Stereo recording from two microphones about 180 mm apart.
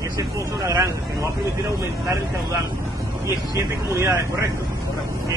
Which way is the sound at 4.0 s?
15° right (ahead or behind).